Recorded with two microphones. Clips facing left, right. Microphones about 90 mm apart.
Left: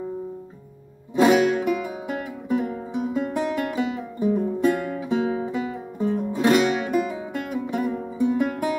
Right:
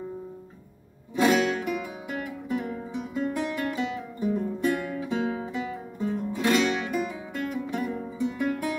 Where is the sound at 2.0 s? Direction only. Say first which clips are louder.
Left 5 dB; 30° left (ahead or behind).